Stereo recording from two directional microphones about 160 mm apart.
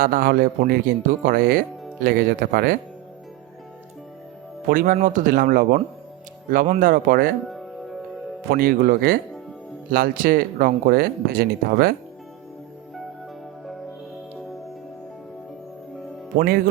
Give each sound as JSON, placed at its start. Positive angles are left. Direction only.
{"t": 0.0, "sound": "speech", "side_deg": -60}
{"t": 4.7, "sound": "speech", "side_deg": -60}
{"t": 7.4, "sound": "music", "side_deg": 0}
{"t": 8.4, "sound": "speech", "side_deg": -65}
{"t": 16.4, "sound": "speech", "side_deg": -65}